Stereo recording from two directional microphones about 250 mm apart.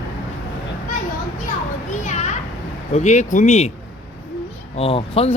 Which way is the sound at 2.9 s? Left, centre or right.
Left.